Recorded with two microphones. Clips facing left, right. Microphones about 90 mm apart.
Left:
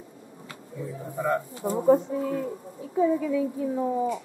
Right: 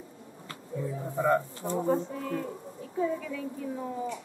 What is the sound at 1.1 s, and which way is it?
Speech, centre (ahead or behind).